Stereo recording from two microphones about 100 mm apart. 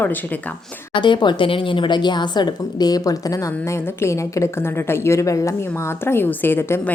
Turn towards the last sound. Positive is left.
turn(degrees=25)  # may be behind; listen again after turning